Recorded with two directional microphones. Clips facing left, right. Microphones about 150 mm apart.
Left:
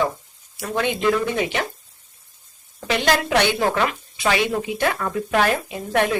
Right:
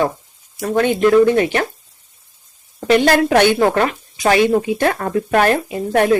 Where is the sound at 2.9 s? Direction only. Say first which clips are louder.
Right 7 dB; 55° right (ahead or behind).